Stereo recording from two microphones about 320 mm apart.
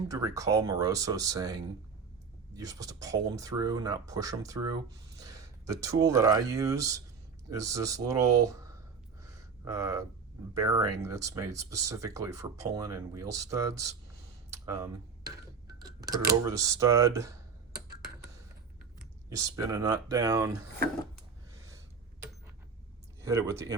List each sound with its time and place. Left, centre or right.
0.1 s speech: centre
9.2 s a sound: centre
10.5 s speech: centre
19.3 s speech: centre
23.2 s speech: centre